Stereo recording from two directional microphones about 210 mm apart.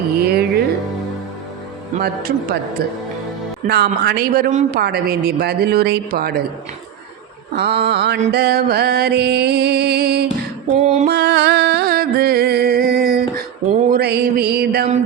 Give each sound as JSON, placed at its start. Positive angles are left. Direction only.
{"t": 0.2, "sound": "music", "side_deg": -50}
{"t": 2.0, "sound": "a man's voice", "side_deg": -45}
{"t": 3.7, "sound": "a man's voice", "side_deg": -50}
{"t": 7.5, "sound": "a man's voice", "side_deg": -50}
{"t": 10.8, "sound": "a sound", "side_deg": -35}
{"t": 11.1, "sound": "music", "side_deg": -50}
{"t": 13.7, "sound": "a man's voice", "side_deg": -45}